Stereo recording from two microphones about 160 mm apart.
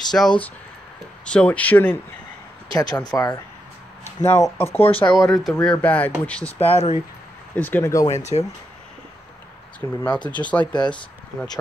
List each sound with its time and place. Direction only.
0.1 s speech: 10° left (ahead or behind)
2.7 s speech: 25° left (ahead or behind)
4.8 s speech: 35° left (ahead or behind)
5.1 s speech: 5° left (ahead or behind)
6.6 s speech: 40° left (ahead or behind)
7.5 s speech: 10° left (ahead or behind)
8.1 s speech: 45° left (ahead or behind)
9.8 s speech: 10° left (ahead or behind)